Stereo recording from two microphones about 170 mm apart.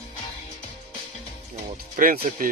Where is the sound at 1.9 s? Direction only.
55° right (ahead or behind).